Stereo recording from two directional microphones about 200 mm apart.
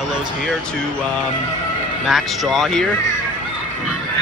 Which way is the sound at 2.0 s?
Centre (ahead or behind).